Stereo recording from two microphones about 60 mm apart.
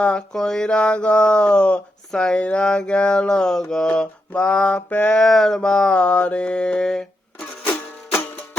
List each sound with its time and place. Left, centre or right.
0.0 s speech: centre
4.3 s mantra: left
5.1 s speech: centre
7.6 s music: left